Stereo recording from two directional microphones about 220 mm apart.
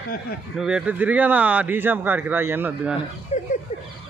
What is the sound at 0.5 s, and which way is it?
Speech, 5° right (ahead or behind).